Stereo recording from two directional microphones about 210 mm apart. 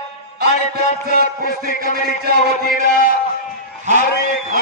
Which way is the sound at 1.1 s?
45° left (ahead or behind).